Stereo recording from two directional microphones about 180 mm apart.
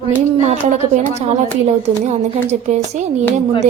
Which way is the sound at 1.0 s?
40° right (ahead or behind).